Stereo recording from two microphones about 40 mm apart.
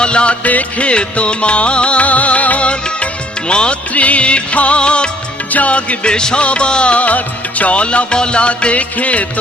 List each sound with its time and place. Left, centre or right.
0.0 s music of bollywood: left
0.4 s music: left
3.5 s music of bollywood: left
3.9 s music of bollywood: left
5.5 s music: left